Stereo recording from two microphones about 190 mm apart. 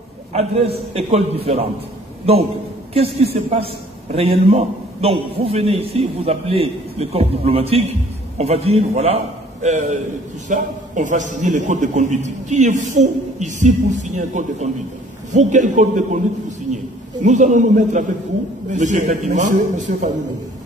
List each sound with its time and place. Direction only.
0.3 s a man's voice: 35° right (ahead or behind)
2.9 s a man's voice: 30° right (ahead or behind)